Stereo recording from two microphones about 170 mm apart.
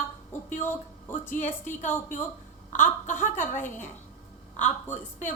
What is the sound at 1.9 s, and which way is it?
Speech, 10° left (ahead or behind).